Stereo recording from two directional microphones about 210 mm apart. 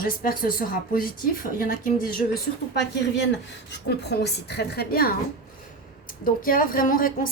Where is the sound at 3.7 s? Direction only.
50° left (ahead or behind).